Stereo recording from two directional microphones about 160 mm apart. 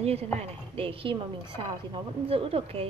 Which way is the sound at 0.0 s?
40° right (ahead or behind).